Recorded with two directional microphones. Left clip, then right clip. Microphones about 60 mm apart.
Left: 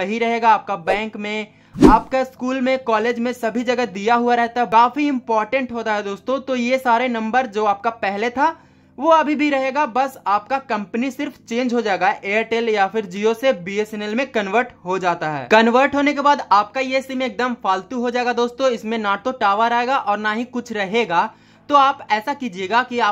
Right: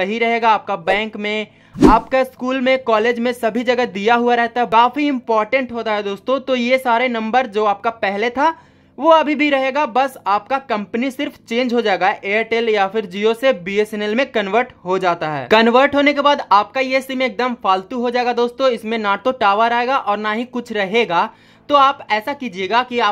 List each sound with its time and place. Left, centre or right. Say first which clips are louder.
0.0 s a woman's voice: right 2 dB; right
6.8 s a woman's voice: right 1 dB; centre; by 14.3 s right
14.3 s a woman's voice: right 2 dB; centre
14.9 s a woman's voice: right 3 dB; right
21.7 s a woman's voice: right 1 dB; centre